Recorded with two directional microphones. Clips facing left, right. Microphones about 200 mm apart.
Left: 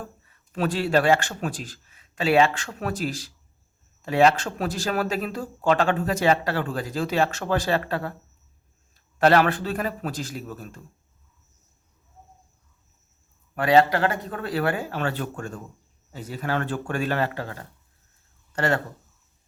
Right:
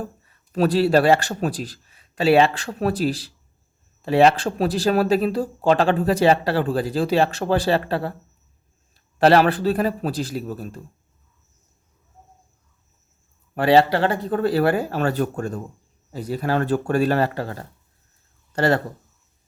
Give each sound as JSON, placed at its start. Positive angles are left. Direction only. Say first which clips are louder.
{"t": 0.5, "sound": "speech", "louder": "right 5 dB", "side_deg": -35}
{"t": 9.1, "sound": "speech", "louder": "right 3 dB", "side_deg": -35}
{"t": 13.6, "sound": "speech", "louder": "right 3 dB", "side_deg": -30}